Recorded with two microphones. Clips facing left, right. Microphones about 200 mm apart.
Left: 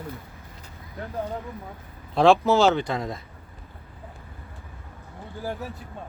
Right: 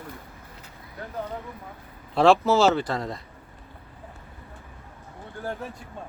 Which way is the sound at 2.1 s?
Centre (ahead or behind).